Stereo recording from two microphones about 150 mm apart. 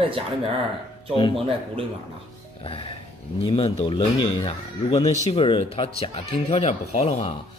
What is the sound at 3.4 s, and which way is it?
Speech, 35° left (ahead or behind).